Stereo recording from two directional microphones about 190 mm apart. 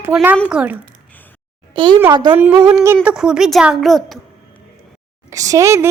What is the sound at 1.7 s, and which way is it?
Speech, 25° right (ahead or behind).